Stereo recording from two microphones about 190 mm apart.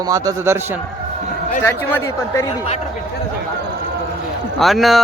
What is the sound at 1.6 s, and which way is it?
Speech, 10° left (ahead or behind).